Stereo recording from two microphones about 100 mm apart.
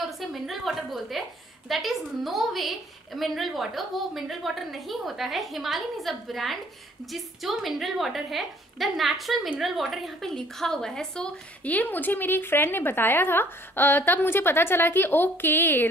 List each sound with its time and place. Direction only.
0.0 s a woman's voice: centre (ahead or behind); by 15.9 s 20° left (ahead or behind)